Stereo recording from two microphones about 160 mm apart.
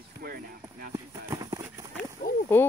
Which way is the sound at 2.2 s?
70° left (ahead or behind).